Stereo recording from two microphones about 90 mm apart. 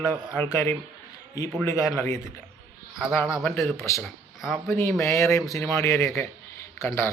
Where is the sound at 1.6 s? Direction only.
35° left (ahead or behind).